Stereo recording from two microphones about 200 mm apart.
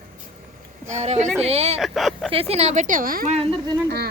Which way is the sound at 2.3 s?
30° right (ahead or behind).